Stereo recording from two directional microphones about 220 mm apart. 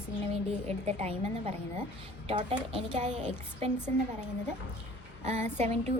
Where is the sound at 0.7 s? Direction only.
30° right (ahead or behind).